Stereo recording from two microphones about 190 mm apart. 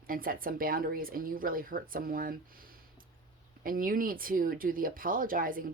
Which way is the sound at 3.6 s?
45° right (ahead or behind).